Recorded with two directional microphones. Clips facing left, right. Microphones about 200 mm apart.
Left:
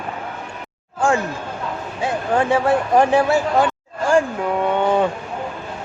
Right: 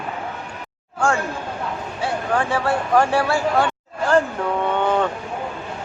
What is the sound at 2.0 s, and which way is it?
Speech, 20° left (ahead or behind).